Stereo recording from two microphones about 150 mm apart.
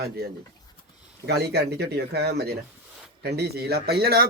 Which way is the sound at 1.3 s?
90° right.